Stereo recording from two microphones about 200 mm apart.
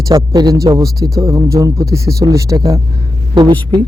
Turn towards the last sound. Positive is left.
turn(degrees=-25)  # may be behind; listen again after turning